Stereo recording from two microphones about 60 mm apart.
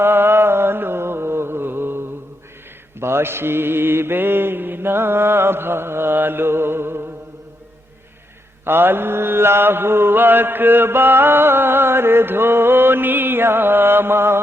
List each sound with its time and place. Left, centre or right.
0.0 s mantra: right
8.6 s mantra: right